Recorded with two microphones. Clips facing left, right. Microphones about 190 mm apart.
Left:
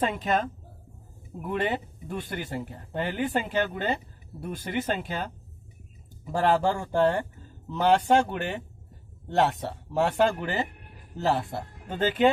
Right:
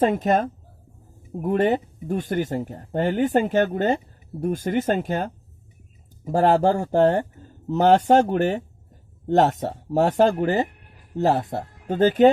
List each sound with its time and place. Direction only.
0.0 s speech: 45° right (ahead or behind)